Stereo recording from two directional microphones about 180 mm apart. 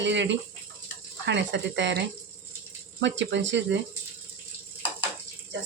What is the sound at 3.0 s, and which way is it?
Speech, 85° right.